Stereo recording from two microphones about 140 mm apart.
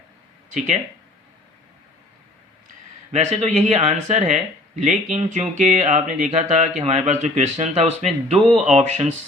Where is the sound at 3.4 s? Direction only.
55° right (ahead or behind).